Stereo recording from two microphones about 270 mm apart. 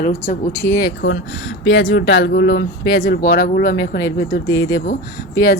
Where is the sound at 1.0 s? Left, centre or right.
Left.